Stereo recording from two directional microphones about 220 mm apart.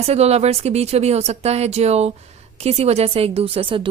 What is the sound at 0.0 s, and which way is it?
Speech, 30° right (ahead or behind).